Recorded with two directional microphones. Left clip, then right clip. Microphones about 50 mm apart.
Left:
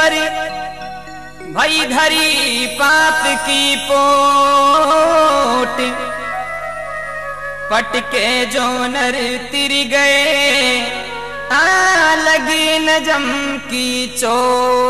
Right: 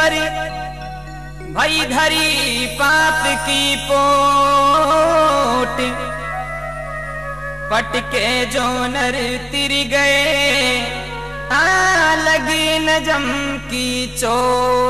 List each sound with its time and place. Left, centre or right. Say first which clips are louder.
0.0 s music: left 2 dB; left
1.6 s music: left 2 dB; left
7.7 s music: left 2 dB; left